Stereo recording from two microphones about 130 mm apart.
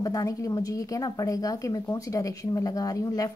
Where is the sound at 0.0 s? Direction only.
25° left (ahead or behind).